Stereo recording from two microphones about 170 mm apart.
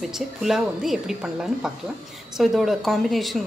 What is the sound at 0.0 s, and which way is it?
A woman's voice, centre (ahead or behind).